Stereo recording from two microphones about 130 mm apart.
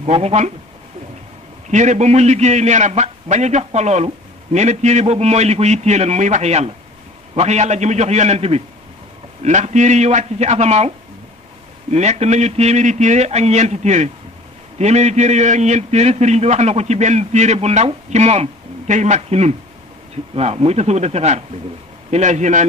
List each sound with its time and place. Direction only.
0.0 s speech: 50° right (ahead or behind)
1.7 s a man's voice: 65° right (ahead or behind)
11.9 s a man's voice: 60° right (ahead or behind)
22.1 s a man's voice: 65° right (ahead or behind)